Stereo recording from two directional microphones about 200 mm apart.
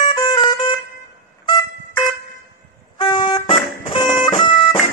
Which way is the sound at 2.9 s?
25° left (ahead or behind).